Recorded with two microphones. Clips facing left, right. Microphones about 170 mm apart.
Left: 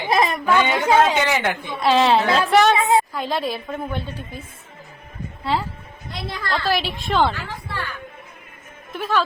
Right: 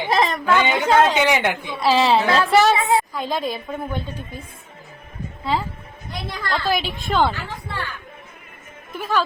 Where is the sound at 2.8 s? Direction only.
20° left (ahead or behind).